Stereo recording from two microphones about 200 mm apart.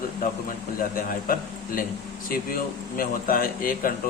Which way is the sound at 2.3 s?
45° left (ahead or behind).